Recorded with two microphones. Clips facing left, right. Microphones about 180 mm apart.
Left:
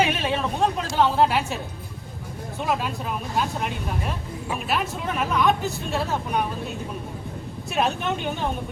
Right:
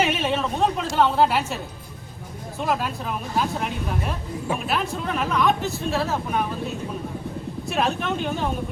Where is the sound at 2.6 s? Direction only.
Centre (ahead or behind).